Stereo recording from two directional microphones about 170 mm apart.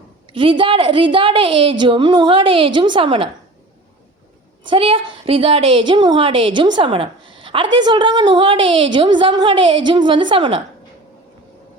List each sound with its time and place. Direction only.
0.3 s a woman's voice: 30° right (ahead or behind)
4.6 s a woman's voice: 30° right (ahead or behind)